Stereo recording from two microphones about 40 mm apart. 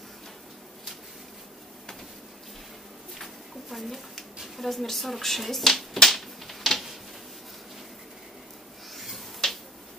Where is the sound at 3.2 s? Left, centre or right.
Centre.